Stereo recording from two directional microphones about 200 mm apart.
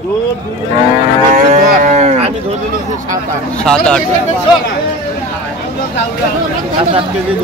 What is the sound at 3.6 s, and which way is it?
Speech, 5° left (ahead or behind).